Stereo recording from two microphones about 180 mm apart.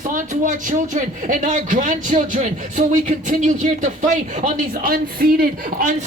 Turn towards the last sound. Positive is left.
turn(degrees=-55)  # may be behind; listen again after turning